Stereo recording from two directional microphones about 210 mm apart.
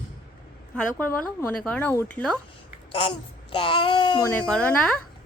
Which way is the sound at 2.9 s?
25° left (ahead or behind).